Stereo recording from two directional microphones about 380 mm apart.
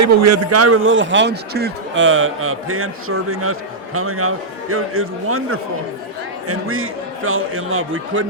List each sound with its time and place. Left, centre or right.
0.0 s speech: right